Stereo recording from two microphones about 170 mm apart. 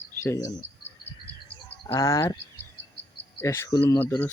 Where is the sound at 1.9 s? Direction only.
15° left (ahead or behind).